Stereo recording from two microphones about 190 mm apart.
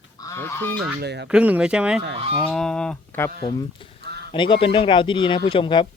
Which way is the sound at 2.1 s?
30° right (ahead or behind).